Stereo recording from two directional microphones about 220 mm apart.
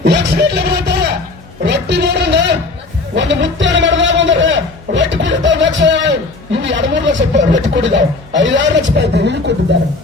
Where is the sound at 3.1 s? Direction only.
55° right (ahead or behind).